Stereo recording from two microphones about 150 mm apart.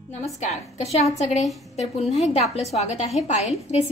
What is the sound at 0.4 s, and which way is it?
A woman's voice, 45° left (ahead or behind).